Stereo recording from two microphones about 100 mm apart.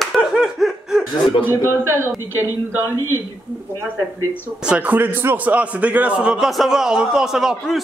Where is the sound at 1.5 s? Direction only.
25° left (ahead or behind).